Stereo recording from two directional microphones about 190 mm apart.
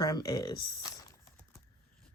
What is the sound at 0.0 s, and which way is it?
Speech, 20° left (ahead or behind).